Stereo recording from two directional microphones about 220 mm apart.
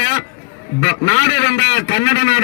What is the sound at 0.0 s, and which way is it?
Music, 25° left (ahead or behind).